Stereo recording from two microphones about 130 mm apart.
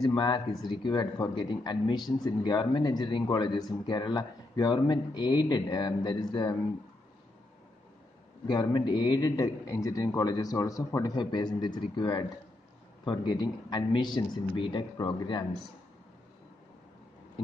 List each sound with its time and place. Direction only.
0.1 s speech: 35° left (ahead or behind)
8.5 s speech: 35° left (ahead or behind)